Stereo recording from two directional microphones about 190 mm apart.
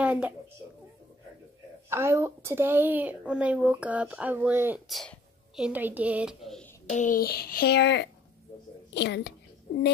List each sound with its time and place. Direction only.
0.0 s a sound: 5° right (ahead or behind)
1.9 s a woman's voice: 15° right (ahead or behind)
6.9 s a child's voice: 40° left (ahead or behind); by 9.3 s 60° left (ahead or behind)